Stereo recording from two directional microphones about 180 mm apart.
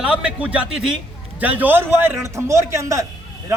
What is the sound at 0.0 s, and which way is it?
A man's voice, 5° right (ahead or behind).